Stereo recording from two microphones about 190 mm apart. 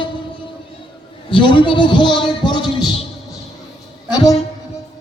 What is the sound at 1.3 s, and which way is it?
A man's voice, 25° left (ahead or behind).